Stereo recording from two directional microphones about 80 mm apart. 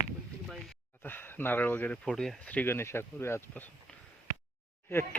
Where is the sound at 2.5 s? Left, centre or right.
Centre.